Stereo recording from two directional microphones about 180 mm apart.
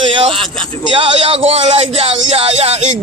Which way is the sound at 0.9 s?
30° right (ahead or behind).